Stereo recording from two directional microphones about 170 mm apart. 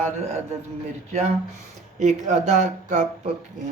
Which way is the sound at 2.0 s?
45° right (ahead or behind).